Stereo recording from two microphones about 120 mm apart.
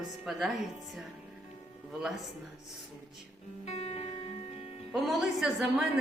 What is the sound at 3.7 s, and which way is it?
Music, 60° left (ahead or behind).